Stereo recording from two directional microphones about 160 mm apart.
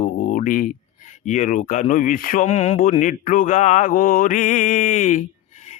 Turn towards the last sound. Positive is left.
turn(degrees=45)  # may be behind; listen again after turning